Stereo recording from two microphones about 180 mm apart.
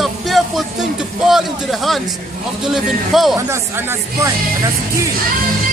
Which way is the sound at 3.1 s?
Centre (ahead or behind).